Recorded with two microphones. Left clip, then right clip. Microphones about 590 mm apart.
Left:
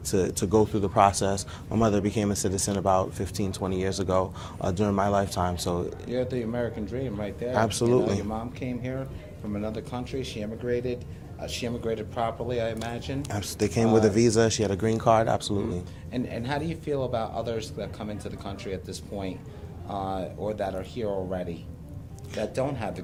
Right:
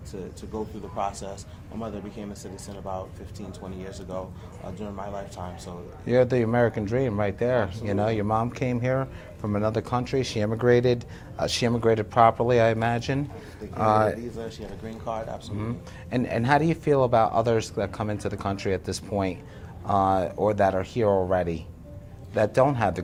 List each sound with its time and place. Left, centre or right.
0.1 s speech: left
6.1 s speech: right
14.3 s speech: left
16.1 s speech: right